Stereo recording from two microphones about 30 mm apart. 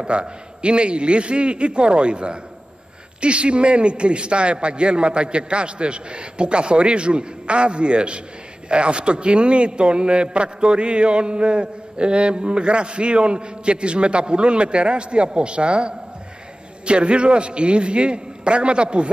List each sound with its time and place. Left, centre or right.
0.0 s a man's voice: right